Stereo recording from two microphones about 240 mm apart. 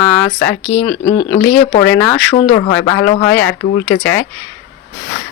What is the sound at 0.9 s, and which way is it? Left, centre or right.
Speech, left.